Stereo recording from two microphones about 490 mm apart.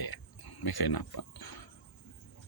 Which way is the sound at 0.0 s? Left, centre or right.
Left.